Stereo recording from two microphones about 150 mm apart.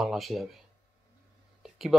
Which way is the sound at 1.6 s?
Centre (ahead or behind).